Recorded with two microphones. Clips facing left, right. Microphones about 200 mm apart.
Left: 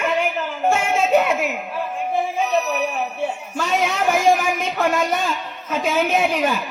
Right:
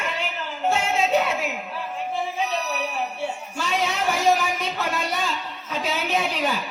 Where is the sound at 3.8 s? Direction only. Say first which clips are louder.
Left 4 dB; 50° left (ahead or behind).